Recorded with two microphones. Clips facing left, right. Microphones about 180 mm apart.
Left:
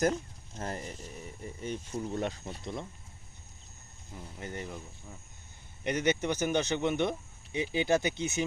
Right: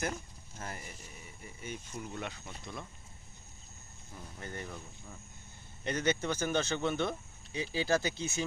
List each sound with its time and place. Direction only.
0.6 s speech: 40° left (ahead or behind)
4.1 s speech: 20° left (ahead or behind)